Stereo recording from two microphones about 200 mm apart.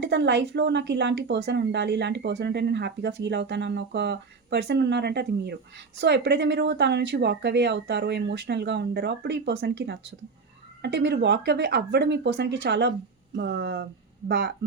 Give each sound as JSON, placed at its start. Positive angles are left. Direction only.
{"t": 0.0, "sound": "speech", "side_deg": -60}